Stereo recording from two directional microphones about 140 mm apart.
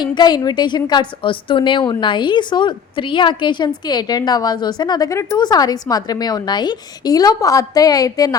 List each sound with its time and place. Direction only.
0.0 s a woman's voice: 30° left (ahead or behind)